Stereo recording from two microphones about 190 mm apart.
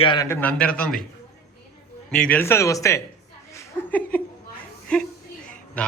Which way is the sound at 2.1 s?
10° left (ahead or behind).